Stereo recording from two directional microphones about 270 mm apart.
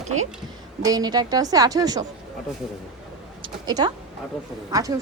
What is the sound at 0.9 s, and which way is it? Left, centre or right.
Speech, centre.